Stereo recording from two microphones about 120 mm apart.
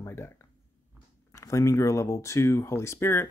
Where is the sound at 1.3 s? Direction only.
25° left (ahead or behind).